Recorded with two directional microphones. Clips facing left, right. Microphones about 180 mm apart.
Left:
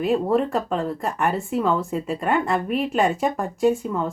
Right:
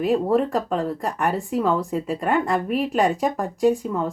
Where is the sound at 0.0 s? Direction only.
40° right (ahead or behind).